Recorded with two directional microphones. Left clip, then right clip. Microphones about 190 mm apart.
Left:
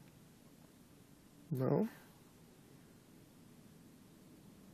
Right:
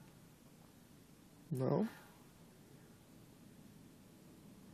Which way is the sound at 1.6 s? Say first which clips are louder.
Left 2 dB; 20° left (ahead or behind).